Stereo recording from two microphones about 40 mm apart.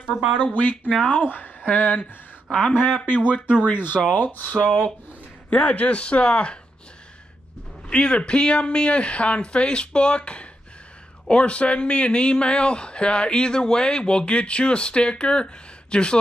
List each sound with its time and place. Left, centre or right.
0.4 s speech: left
0.8 s speech: left
1.1 s a woman's voice: left
4.6 s speech: left
5.5 s speech: left
7.9 s speech: left